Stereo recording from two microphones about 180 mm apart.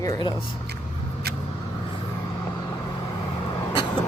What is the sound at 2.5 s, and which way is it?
Vehicle, 15° left (ahead or behind).